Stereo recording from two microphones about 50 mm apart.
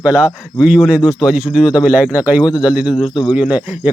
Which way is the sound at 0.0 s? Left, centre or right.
Right.